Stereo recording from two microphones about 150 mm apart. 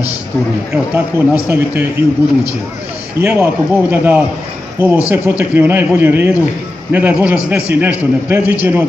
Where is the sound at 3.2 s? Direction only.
15° right (ahead or behind).